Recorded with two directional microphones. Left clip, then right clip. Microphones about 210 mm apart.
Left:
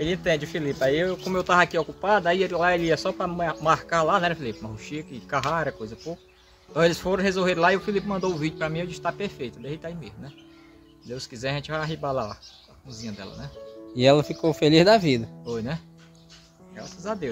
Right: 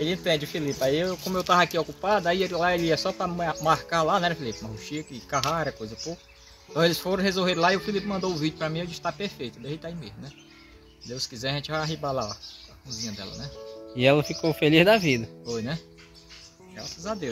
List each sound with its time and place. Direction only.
0.0 s speech: 5° left (ahead or behind)